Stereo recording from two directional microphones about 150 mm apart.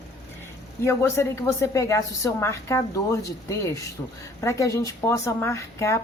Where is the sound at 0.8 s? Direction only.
20° left (ahead or behind).